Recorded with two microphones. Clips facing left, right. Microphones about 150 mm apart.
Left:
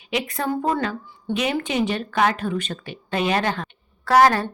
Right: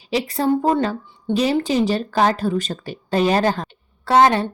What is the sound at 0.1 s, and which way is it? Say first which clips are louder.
A woman's voice: right 5 dB; 30° right (ahead or behind).